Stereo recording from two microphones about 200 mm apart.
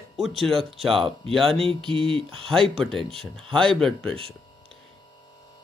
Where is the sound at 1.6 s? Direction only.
25° right (ahead or behind).